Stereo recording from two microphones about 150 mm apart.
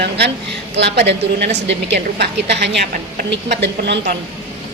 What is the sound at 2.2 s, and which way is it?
A woman's voice, 90° right.